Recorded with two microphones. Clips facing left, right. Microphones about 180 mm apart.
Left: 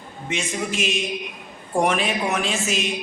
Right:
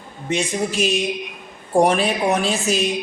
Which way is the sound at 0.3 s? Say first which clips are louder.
Right 5 dB; 35° right (ahead or behind).